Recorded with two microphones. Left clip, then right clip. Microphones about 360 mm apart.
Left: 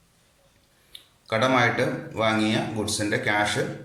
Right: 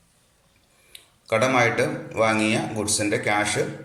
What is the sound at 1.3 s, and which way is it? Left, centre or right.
A man's voice, centre.